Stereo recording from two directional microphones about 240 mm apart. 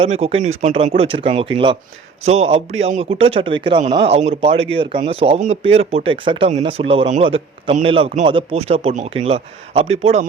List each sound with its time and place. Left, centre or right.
0.0 s speech: right